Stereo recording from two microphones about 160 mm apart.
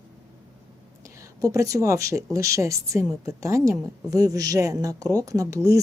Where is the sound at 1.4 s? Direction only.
20° right (ahead or behind).